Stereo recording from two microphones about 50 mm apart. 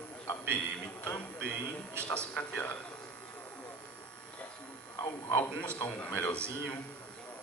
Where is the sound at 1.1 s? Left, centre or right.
Left.